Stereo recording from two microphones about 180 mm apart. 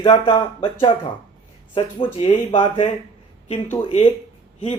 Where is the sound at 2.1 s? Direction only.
30° left (ahead or behind).